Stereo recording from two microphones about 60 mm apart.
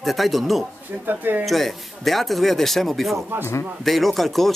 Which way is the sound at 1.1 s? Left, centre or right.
Right.